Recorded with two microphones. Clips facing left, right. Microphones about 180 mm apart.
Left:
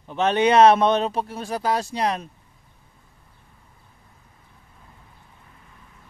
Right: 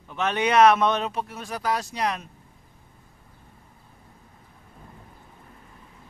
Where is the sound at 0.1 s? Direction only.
30° left (ahead or behind).